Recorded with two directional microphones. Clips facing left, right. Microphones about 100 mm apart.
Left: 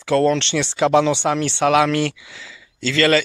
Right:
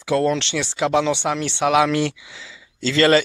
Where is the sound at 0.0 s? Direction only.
10° right (ahead or behind).